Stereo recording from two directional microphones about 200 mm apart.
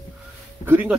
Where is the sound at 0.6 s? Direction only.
10° right (ahead or behind).